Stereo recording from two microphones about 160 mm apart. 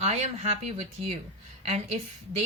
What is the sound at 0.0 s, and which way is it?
Speech, 45° right (ahead or behind).